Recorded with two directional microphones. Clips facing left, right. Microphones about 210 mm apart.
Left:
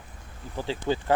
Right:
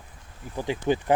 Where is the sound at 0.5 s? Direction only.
15° right (ahead or behind).